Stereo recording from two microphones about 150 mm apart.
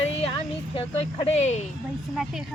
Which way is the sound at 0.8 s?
45° left (ahead or behind).